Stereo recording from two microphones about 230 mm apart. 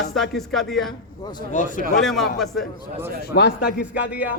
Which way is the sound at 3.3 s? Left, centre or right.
Left.